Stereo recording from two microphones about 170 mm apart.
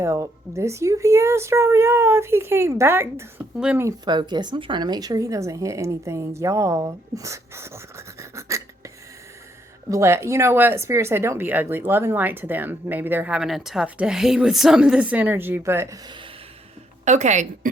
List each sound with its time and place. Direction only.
0.0 s speech: 15° right (ahead or behind)
3.8 s speech: 25° right (ahead or behind)
9.9 s speech: 15° right (ahead or behind)
17.1 s a woman's voice: 45° right (ahead or behind)